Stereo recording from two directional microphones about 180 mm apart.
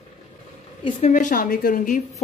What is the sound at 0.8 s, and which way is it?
Speech, 40° left (ahead or behind).